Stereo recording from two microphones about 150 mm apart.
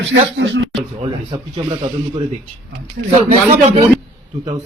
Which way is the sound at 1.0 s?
35° right (ahead or behind).